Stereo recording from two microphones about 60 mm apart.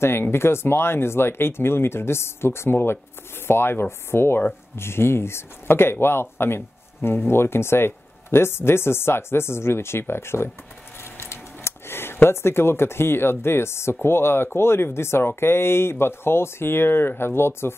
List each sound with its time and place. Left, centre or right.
0.0 s speech: left